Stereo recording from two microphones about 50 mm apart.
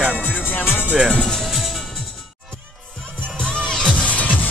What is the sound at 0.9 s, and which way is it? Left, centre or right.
Speech, right.